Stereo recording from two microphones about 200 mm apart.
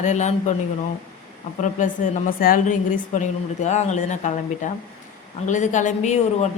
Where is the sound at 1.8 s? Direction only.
40° left (ahead or behind).